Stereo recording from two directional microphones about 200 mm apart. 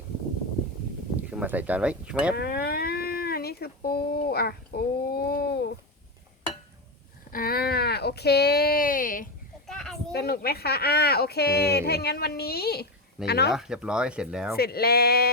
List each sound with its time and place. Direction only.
1.3 s speech: 5° right (ahead or behind)
2.3 s a sound: 50° left (ahead or behind)
7.3 s speech: 45° left (ahead or behind)
9.6 s children playing: centre (ahead or behind)
10.1 s speech: 50° left (ahead or behind)
13.5 s speech: 5° right (ahead or behind)
14.5 s speech: 50° left (ahead or behind)